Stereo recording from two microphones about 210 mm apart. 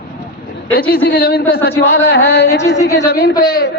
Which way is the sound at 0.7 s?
45° left (ahead or behind).